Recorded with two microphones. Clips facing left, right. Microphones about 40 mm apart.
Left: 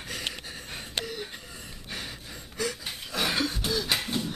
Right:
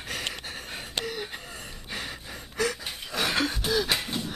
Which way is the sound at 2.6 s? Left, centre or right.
Centre.